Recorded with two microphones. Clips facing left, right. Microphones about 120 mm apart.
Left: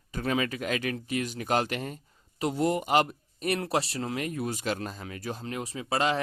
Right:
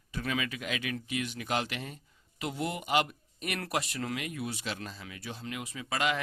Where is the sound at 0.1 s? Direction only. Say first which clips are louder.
Left 5 dB; 40° left (ahead or behind).